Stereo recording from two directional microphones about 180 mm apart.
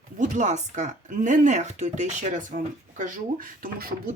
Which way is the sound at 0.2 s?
40° right (ahead or behind).